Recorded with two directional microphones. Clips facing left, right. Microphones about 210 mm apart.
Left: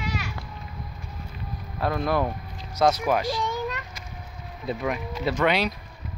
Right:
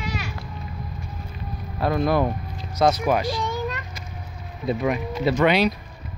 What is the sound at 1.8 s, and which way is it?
Speech, 15° right (ahead or behind).